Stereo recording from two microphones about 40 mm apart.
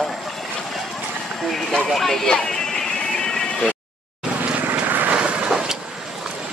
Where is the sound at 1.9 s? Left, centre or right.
Centre.